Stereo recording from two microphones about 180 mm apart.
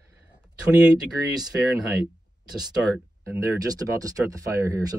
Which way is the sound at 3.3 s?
20° right (ahead or behind).